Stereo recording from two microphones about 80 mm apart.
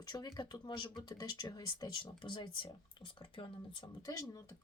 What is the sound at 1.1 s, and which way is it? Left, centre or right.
Speech, left.